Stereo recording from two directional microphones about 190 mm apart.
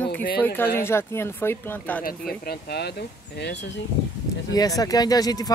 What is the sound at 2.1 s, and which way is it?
Speech, 50° left (ahead or behind).